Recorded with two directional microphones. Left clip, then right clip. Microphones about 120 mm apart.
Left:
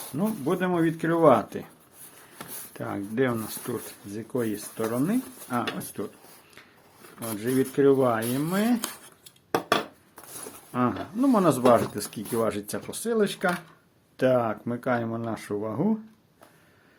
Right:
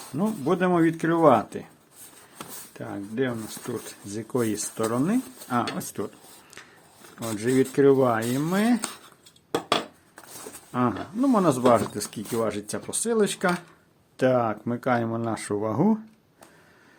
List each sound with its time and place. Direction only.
0.2 s speech: 25° right (ahead or behind)
1.5 s speech: centre (ahead or behind)
2.7 s speech: 20° left (ahead or behind)
4.1 s speech: 45° right (ahead or behind)
7.3 s speech: 35° right (ahead or behind); by 8.5 s 20° right (ahead or behind)
8.5 s speech: 35° right (ahead or behind)
10.7 s speech: 25° right (ahead or behind)
12.9 s speech: 30° right (ahead or behind)